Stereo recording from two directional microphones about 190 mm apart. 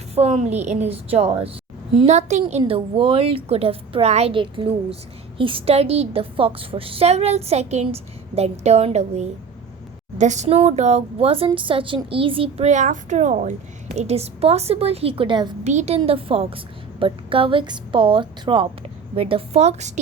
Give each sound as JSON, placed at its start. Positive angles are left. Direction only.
{"t": 0.1, "sound": "a woman's voice", "side_deg": -35}
{"t": 15.6, "sound": "a woman's voice", "side_deg": -35}